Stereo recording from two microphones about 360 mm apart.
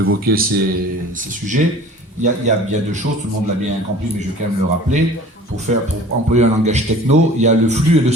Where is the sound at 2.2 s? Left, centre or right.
Centre.